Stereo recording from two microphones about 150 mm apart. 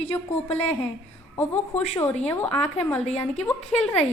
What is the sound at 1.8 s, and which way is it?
Speech, 45° left (ahead or behind).